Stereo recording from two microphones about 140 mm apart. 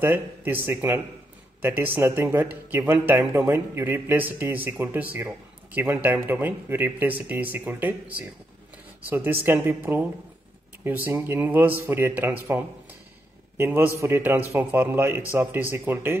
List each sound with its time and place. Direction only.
0.0 s speech: 15° right (ahead or behind)